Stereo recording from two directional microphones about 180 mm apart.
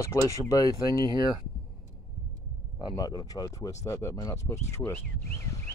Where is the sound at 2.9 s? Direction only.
20° left (ahead or behind).